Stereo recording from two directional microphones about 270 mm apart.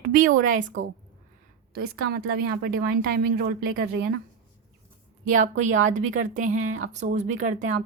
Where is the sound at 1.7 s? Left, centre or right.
Right.